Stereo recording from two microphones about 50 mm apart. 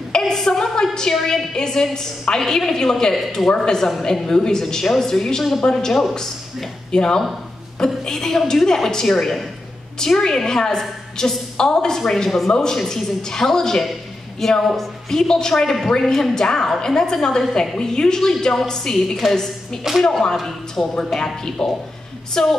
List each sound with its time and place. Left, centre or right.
0.2 s a sound: centre
0.9 s a woman's voice: centre
5.6 s a woman's voice: centre